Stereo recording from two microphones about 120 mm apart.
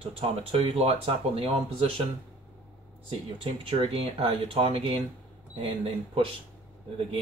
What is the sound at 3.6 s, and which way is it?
Speech, 55° right (ahead or behind).